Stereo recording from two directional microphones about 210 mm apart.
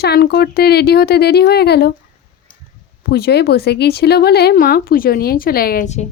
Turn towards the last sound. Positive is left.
turn(degrees=35)  # may be behind; listen again after turning